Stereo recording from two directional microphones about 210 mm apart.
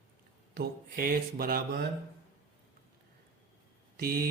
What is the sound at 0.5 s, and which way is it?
Speech, 45° right (ahead or behind).